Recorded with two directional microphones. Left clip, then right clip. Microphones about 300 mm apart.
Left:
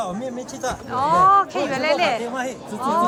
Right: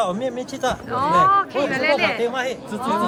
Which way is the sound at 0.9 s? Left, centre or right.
Centre.